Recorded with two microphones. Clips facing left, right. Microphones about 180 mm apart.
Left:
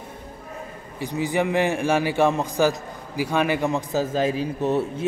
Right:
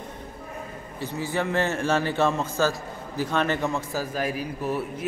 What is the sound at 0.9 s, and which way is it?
A man's voice, 15° left (ahead or behind).